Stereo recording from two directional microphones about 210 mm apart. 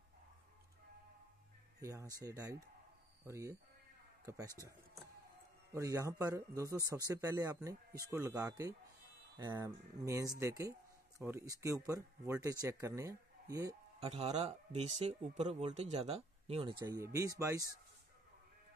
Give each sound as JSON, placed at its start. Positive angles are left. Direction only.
{"t": 1.8, "sound": "speech", "side_deg": -15}
{"t": 5.7, "sound": "speech", "side_deg": -15}
{"t": 13.9, "sound": "speech", "side_deg": -30}